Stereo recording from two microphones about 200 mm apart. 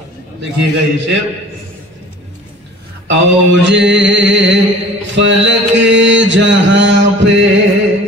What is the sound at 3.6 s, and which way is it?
Music, 65° right (ahead or behind).